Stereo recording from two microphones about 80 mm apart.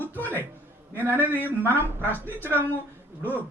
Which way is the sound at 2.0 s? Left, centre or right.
Left.